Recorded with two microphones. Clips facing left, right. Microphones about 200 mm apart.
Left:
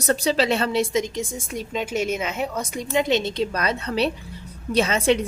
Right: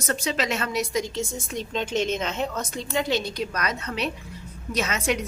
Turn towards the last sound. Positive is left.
turn(degrees=30)  # may be behind; listen again after turning